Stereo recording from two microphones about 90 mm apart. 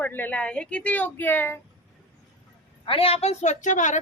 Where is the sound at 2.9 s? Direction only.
90° left.